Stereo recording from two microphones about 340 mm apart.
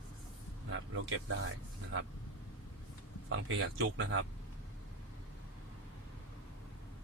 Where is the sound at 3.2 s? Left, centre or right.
Right.